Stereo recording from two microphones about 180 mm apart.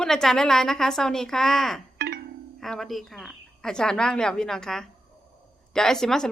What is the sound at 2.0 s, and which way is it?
Music, 60° right (ahead or behind).